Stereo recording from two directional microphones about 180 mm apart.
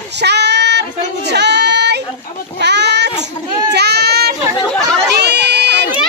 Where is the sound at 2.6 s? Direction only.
70° right (ahead or behind).